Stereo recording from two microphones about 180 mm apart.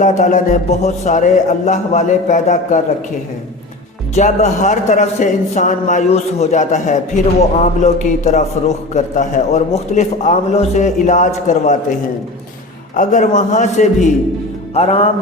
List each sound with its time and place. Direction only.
0.0 s a man's voice: 45° left (ahead or behind)
4.1 s a man's voice: 40° left (ahead or behind)
13.0 s a man's voice: 45° left (ahead or behind)